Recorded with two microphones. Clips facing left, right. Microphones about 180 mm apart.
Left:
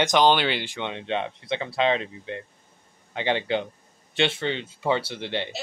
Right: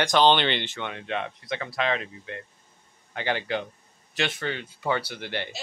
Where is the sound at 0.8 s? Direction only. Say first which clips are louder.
Left 3 dB; 20° left (ahead or behind).